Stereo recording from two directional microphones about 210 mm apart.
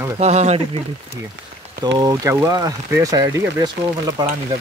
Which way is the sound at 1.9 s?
15° right (ahead or behind).